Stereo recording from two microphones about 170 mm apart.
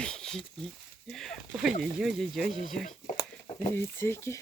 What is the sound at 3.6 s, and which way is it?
Speech, 15° left (ahead or behind).